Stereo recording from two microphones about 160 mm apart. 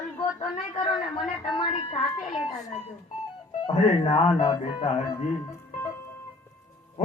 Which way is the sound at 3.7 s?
35° left (ahead or behind).